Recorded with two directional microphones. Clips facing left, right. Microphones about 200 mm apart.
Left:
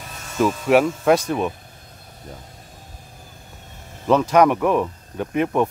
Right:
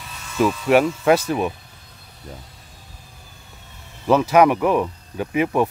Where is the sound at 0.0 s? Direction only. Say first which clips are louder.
Left 1 dB; 45° left (ahead or behind).